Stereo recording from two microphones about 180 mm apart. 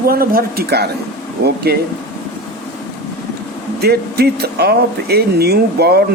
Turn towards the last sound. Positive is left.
turn(degrees=-60)  # may be behind; listen again after turning